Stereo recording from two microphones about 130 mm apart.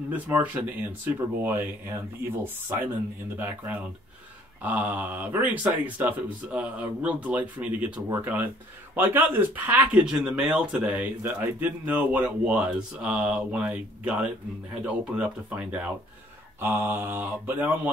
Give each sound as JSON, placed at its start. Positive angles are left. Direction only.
{"t": 0.1, "sound": "speech", "side_deg": -10}